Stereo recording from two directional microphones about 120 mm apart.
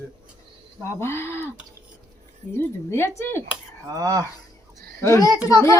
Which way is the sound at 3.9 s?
30° right (ahead or behind).